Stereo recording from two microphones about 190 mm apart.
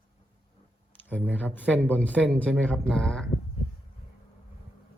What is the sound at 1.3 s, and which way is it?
Speech, 10° left (ahead or behind).